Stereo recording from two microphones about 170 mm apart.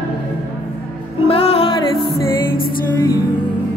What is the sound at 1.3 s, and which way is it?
Music, 35° left (ahead or behind).